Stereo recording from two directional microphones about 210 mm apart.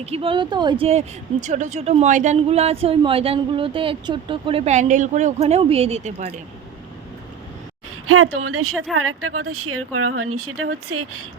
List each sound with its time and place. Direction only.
0.0 s speech: 30° right (ahead or behind)
8.0 s speech: 90° right